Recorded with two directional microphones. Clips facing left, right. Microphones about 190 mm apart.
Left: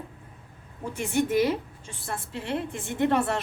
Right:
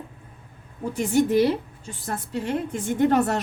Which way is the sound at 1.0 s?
35° right (ahead or behind).